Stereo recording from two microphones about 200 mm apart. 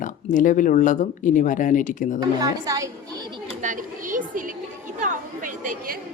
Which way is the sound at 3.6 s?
40° right (ahead or behind).